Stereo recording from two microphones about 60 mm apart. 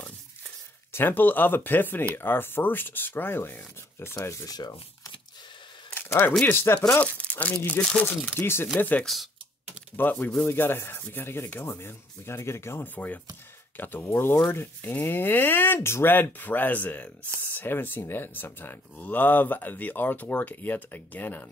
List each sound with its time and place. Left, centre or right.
0.9 s speech: left
4.5 s speech: left
5.9 s a sound: left
6.4 s speech: left
7.0 s speech: left
7.8 s speech: left
8.7 s chopping: left
9.0 s speech: centre
9.9 s speech: left
11.0 s speech: left
12.8 s chopping: left
13.7 s speech: left
14.8 s chopping: left
15.0 s speech: left